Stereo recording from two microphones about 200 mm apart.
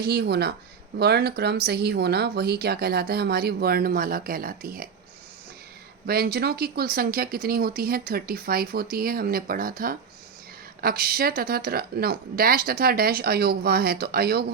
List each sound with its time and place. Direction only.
0.0 s speech: 50° right (ahead or behind)
6.1 s speech: 50° right (ahead or behind)